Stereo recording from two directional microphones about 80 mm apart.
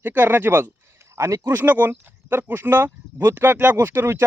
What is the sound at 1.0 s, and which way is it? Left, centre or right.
Speech, right.